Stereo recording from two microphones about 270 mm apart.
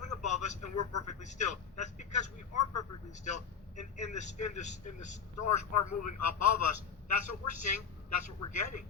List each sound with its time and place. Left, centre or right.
0.2 s a sound: left
0.6 s a man's voice: left
1.2 s a man's voice: left
5.4 s a man's voice: left